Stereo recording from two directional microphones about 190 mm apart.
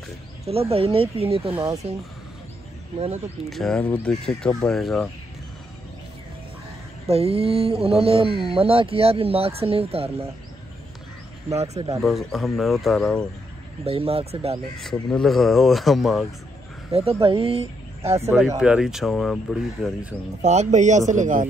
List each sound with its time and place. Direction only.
0.5 s speech: 30° right (ahead or behind)
3.4 s speech: centre (ahead or behind)
7.1 s speech: 30° right (ahead or behind)
11.5 s speech: 35° right (ahead or behind)
12.0 s speech: centre (ahead or behind)
13.8 s speech: 30° right (ahead or behind)
14.8 s speech: centre (ahead or behind)
16.9 s speech: 30° right (ahead or behind)
18.6 s speech: 5° right (ahead or behind)
20.4 s speech: 40° right (ahead or behind)